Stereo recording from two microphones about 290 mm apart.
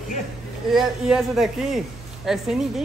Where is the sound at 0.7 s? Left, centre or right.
Centre.